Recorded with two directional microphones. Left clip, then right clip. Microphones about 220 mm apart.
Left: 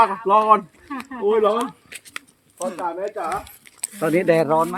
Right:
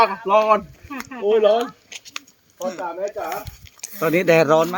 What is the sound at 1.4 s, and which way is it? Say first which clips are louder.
Speech: right 2 dB; 35° left (ahead or behind).